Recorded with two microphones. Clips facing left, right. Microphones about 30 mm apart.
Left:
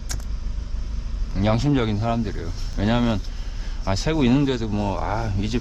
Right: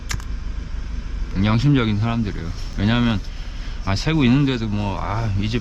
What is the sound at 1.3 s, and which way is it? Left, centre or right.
Speech, right.